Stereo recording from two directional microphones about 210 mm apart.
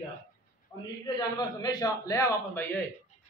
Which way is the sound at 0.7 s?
10° left (ahead or behind).